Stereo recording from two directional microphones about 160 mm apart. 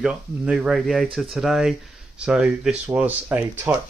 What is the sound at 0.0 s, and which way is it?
Speech, 5° right (ahead or behind).